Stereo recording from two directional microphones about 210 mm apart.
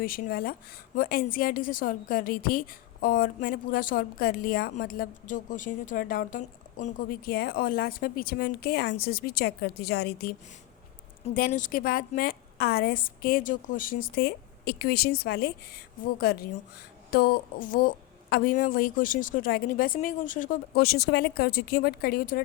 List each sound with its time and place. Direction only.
0.0 s a woman's voice: 45° left (ahead or behind)
11.3 s a woman's voice: 40° left (ahead or behind)